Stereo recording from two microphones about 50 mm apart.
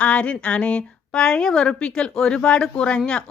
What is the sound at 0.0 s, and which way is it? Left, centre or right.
A woman's voice, left.